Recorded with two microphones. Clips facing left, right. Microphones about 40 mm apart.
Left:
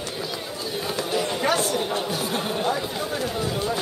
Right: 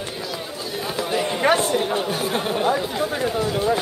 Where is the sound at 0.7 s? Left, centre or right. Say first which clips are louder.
Right 2 dB; centre.